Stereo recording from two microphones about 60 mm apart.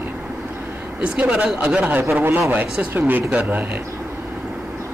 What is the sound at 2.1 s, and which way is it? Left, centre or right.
Speech, right.